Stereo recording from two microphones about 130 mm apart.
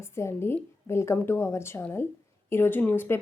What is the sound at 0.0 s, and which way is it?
A woman's voice, 20° left (ahead or behind).